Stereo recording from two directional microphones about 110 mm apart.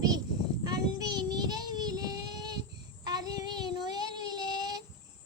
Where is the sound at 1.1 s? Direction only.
40° right (ahead or behind).